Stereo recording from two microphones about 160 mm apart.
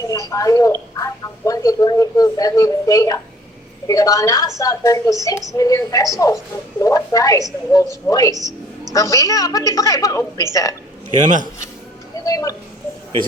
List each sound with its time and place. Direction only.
0.0 s a woman's voice: 20° left (ahead or behind)
11.2 s a man's voice: 50° right (ahead or behind)
12.2 s a sound: 20° left (ahead or behind)